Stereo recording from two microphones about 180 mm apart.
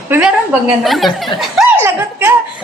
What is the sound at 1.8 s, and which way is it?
Chuckle, 15° right (ahead or behind).